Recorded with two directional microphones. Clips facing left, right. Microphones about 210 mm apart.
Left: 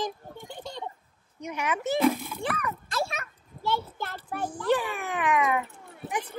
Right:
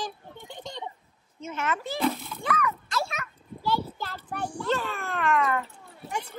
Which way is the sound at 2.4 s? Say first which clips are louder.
Right 4 dB; 30° left (ahead or behind).